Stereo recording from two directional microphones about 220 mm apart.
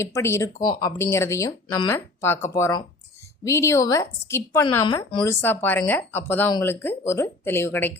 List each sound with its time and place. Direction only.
0.0 s speech: 10° left (ahead or behind)